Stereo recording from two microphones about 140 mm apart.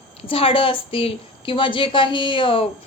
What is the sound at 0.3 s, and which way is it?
A woman's voice, 40° left (ahead or behind).